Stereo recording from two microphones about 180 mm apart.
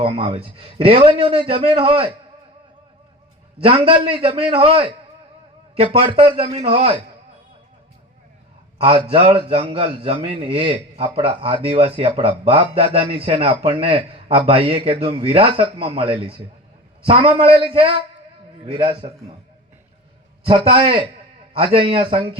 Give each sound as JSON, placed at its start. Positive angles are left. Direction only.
{"t": 0.0, "sound": "a man's voice", "side_deg": -30}
{"t": 3.6, "sound": "a man's voice", "side_deg": -30}
{"t": 8.8, "sound": "a man's voice", "side_deg": -30}
{"t": 20.4, "sound": "speech", "side_deg": -30}